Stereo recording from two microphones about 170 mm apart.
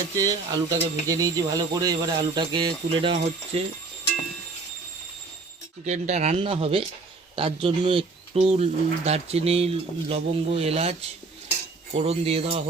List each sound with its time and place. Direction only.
0.3 s speech: 20° right (ahead or behind)
5.8 s speech: 45° right (ahead or behind)